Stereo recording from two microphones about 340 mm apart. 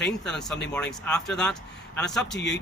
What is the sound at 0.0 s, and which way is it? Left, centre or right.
Speech, centre.